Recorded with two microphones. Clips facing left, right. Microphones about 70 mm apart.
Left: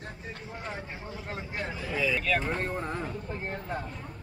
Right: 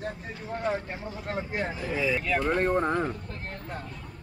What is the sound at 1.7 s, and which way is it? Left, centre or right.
Speech, right.